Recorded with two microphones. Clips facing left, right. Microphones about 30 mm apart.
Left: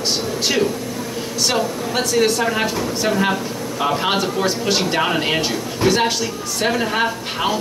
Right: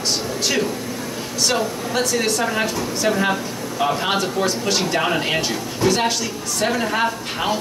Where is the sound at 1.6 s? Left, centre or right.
Centre.